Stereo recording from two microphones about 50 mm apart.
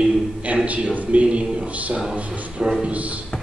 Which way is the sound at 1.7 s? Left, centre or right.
Right.